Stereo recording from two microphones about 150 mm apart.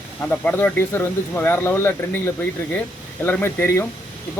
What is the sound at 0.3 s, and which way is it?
Speech, 10° left (ahead or behind).